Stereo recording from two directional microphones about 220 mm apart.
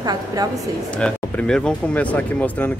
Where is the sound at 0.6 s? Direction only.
5° left (ahead or behind).